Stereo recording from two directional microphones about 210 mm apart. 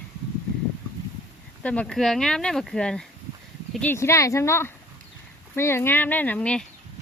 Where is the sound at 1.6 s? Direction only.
5° left (ahead or behind).